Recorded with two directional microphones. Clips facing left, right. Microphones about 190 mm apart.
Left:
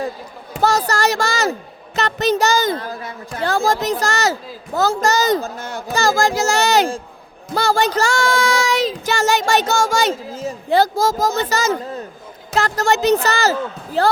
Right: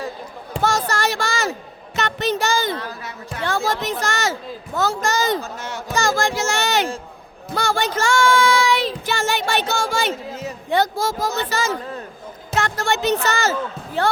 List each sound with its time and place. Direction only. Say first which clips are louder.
0.6 s a sound: left 4 dB; 40° left (ahead or behind)
2.0 s child singing: left 4 dB; 40° left (ahead or behind)
12.5 s a woman's voice: left 4 dB; 40° left (ahead or behind)